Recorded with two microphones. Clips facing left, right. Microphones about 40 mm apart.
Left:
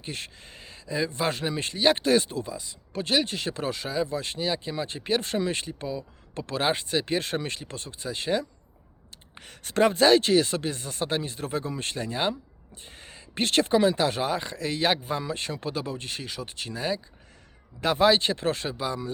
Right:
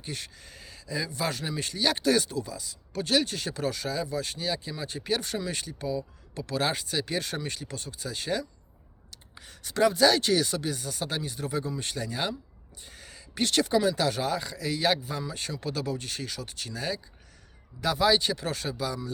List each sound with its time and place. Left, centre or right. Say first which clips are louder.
0.0 s speech: left 2 dB; left
9.3 s speech: left 4 dB; left
17.7 s speech: left 3 dB; left